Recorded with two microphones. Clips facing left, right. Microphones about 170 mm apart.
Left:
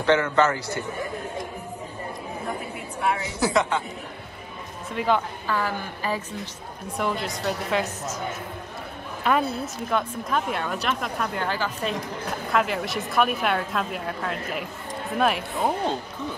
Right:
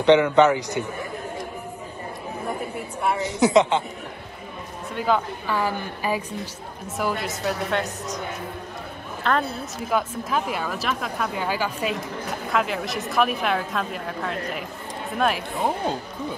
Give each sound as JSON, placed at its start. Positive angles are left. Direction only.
{"t": 0.0, "sound": "a woman's voice", "side_deg": -20}
{"t": 3.3, "sound": "speech", "side_deg": -20}
{"t": 4.9, "sound": "speech", "side_deg": 0}
{"t": 5.5, "sound": "a woman's voice", "side_deg": -15}
{"t": 9.3, "sound": "a woman's voice", "side_deg": 10}
{"t": 9.8, "sound": "speech", "side_deg": -5}